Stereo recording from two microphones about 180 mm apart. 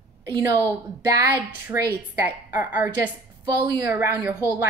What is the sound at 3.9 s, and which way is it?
Speech, 10° right (ahead or behind).